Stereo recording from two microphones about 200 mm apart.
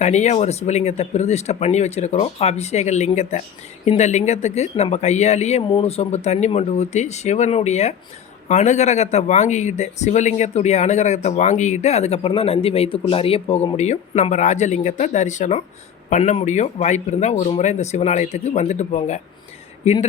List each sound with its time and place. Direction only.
0.0 s speech: 35° left (ahead or behind)